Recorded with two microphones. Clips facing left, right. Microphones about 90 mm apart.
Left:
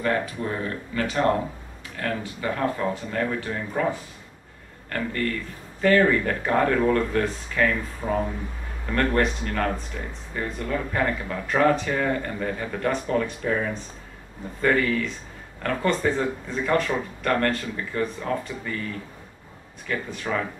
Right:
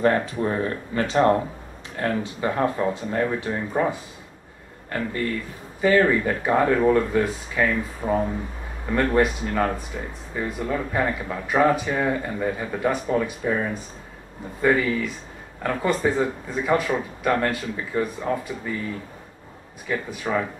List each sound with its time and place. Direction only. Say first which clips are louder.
0.0 s speech: right 4 dB; 35° right (ahead or behind); by 18.8 s 10° right (ahead or behind)
19.9 s speech: right 2 dB; 5° right (ahead or behind)